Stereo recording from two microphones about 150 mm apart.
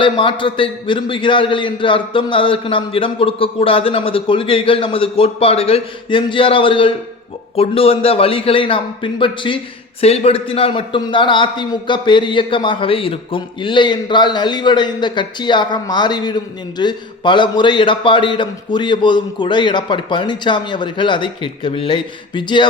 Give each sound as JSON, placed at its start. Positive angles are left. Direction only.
{"t": 0.0, "sound": "a man's voice", "side_deg": 35}